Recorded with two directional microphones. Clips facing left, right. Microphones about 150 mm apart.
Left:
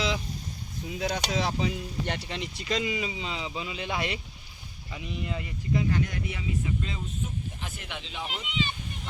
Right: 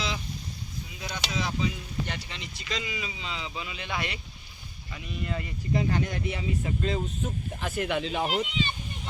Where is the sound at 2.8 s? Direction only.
30° left (ahead or behind); by 5.5 s 15° left (ahead or behind).